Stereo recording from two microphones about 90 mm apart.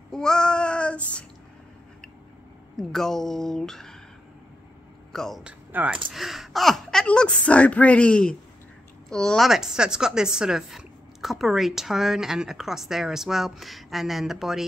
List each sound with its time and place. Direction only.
0.1 s child singing: 5° left (ahead or behind)
2.8 s speech: 5° left (ahead or behind)
5.1 s speech: 5° left (ahead or behind)
5.4 s speech: 15° right (ahead or behind)
6.1 s speech: centre (ahead or behind)
9.5 s speech: 5° right (ahead or behind)